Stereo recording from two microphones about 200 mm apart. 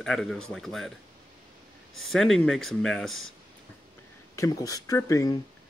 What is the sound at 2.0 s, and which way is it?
Speech, centre (ahead or behind).